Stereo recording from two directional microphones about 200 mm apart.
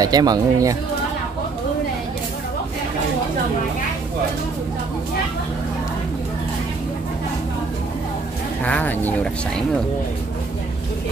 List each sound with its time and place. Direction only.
0.0 s speech: 20° right (ahead or behind)
8.6 s speech: 10° left (ahead or behind)